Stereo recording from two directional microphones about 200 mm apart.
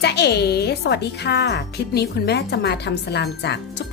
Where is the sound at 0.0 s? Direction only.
55° left (ahead or behind).